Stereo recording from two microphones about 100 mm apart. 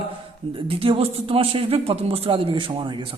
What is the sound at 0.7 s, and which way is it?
A man's voice, 70° right (ahead or behind).